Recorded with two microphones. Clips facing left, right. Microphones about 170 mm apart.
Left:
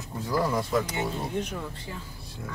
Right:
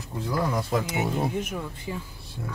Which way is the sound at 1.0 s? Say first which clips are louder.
Right 3 dB; 10° right (ahead or behind).